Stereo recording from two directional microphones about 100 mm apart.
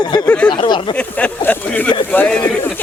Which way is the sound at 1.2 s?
15° left (ahead or behind).